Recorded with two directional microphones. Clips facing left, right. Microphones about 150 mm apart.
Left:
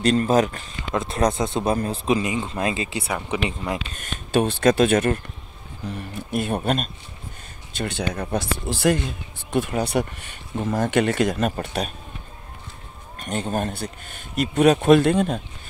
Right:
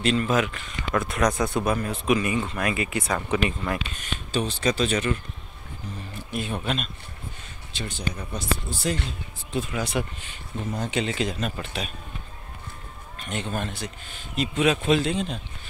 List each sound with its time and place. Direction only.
0.0 s speech: 40° left (ahead or behind); by 3.0 s 25° left (ahead or behind)
3.0 s speech: 10° left (ahead or behind)
4.0 s speech: 55° left (ahead or behind)
7.7 s speech: 65° left (ahead or behind); by 11.9 s 45° left (ahead or behind)
13.2 s speech: 40° left (ahead or behind)